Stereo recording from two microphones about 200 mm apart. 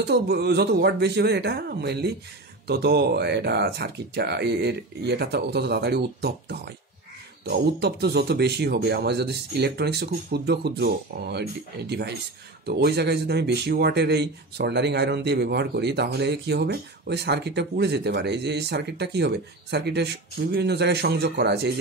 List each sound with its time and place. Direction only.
0.0 s speech: 55° right (ahead or behind)